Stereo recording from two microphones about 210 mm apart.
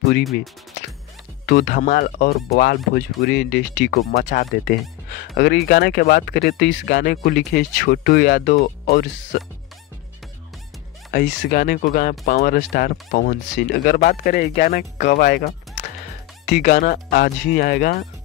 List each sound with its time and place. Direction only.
1.4 s speech: 45° left (ahead or behind)
11.1 s speech: 50° left (ahead or behind)